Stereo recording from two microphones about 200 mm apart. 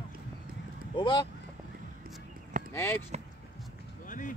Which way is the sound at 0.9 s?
25° left (ahead or behind).